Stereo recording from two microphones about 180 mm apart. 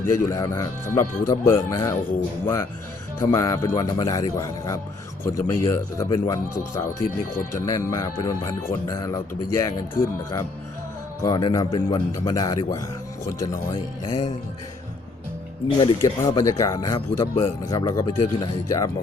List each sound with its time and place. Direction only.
0.0 s speech: 15° left (ahead or behind)
7.5 s speech: 15° left (ahead or behind)
15.8 s speech: 25° left (ahead or behind)